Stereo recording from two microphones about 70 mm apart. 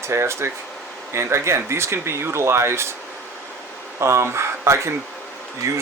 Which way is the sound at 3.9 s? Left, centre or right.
Right.